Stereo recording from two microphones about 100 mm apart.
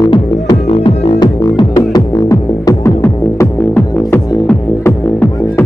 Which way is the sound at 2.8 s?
25° left (ahead or behind).